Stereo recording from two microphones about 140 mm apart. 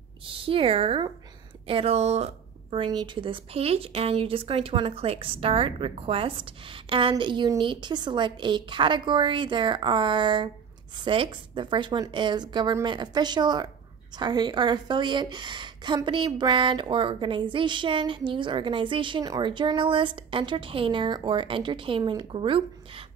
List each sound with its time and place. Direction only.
0.2 s a woman's voice: 40° right (ahead or behind)
2.8 s a woman's voice: 30° right (ahead or behind)